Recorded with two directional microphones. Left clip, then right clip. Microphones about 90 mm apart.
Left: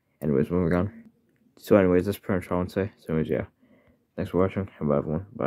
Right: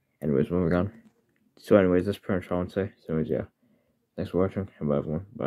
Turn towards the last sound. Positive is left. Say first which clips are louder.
# left 3 dB
turn(degrees=20)  # may be behind; listen again after turning